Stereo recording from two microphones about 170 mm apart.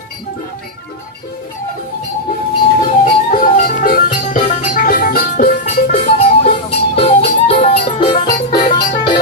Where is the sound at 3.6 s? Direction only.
55° left (ahead or behind).